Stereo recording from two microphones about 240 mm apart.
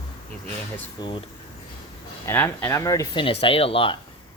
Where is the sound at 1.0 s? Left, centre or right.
Centre.